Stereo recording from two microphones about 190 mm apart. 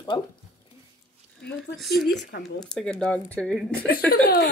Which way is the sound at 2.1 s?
55° left (ahead or behind).